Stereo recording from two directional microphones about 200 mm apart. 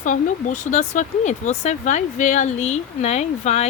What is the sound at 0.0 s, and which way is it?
Speech, 40° left (ahead or behind).